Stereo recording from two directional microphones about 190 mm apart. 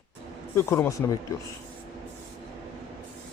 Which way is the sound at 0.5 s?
15° left (ahead or behind).